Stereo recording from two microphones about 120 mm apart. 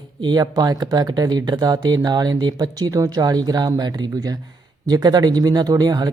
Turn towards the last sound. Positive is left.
turn(degrees=-35)  # may be behind; listen again after turning